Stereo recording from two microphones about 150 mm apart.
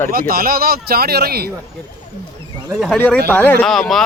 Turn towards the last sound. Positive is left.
turn(degrees=0)  # may be behind; listen again after turning